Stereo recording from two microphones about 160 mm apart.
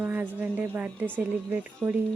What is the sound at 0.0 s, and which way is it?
A woman's voice, 10° right (ahead or behind).